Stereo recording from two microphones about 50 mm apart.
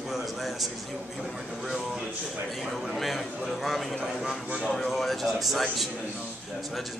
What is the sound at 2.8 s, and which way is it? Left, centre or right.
A man's voice, centre.